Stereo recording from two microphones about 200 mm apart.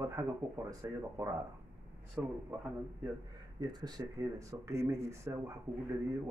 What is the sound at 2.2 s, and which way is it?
Speech, 5° right (ahead or behind).